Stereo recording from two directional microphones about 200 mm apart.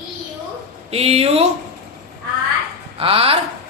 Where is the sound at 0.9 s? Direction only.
30° right (ahead or behind).